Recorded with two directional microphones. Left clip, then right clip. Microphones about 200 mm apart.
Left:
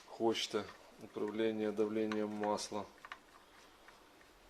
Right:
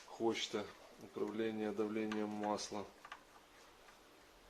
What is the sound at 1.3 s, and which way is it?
Speech, 35° left (ahead or behind).